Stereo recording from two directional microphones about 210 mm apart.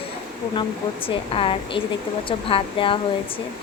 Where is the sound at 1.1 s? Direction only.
25° left (ahead or behind).